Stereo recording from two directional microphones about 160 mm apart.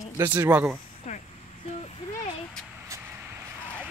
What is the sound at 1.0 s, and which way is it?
Speech, 45° left (ahead or behind).